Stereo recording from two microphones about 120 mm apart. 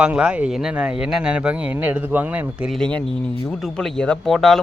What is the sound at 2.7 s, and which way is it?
A man's voice, 10° left (ahead or behind).